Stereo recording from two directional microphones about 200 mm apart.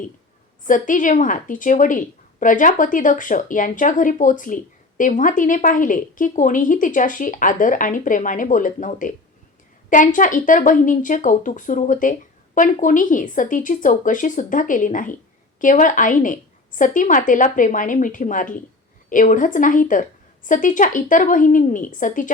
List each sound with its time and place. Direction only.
0.7 s a woman's voice: 40° left (ahead or behind)